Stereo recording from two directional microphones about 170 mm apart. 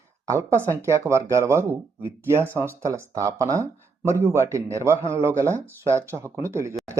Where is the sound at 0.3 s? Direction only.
15° right (ahead or behind).